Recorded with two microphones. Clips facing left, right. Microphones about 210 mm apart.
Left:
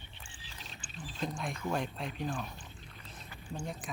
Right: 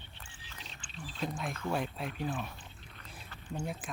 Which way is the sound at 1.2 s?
Centre (ahead or behind).